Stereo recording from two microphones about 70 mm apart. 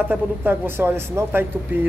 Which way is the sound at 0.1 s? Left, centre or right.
Right.